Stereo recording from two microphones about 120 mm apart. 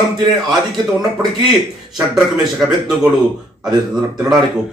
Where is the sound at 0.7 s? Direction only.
35° right (ahead or behind).